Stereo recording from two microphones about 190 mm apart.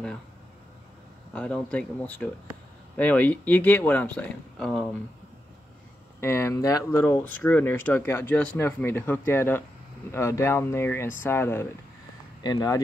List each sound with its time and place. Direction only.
1.3 s speech: 5° left (ahead or behind)
6.2 s speech: 15° left (ahead or behind)